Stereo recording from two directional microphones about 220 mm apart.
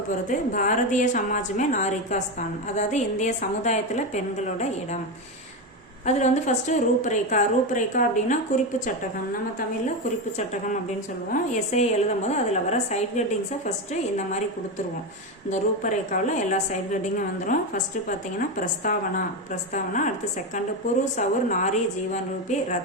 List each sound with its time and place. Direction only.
0.3 s a woman's voice: 35° left (ahead or behind)
6.1 s a woman's voice: 30° left (ahead or behind)
11.3 s a woman's voice: 30° left (ahead or behind)
15.4 s a woman's voice: 35° left (ahead or behind)
21.2 s a woman's voice: 35° left (ahead or behind)